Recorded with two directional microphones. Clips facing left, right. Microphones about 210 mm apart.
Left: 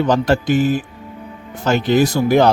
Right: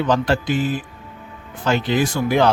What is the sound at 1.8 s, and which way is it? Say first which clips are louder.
Speech: left 5 dB; 40° left (ahead or behind).